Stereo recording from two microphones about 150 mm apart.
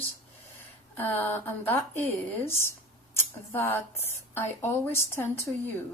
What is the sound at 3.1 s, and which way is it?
Speech, 15° left (ahead or behind).